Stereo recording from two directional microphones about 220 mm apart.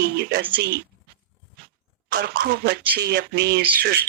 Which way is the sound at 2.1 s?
45° right (ahead or behind).